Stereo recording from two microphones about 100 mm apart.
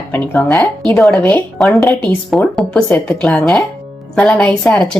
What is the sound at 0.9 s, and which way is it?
Speech, 5° left (ahead or behind).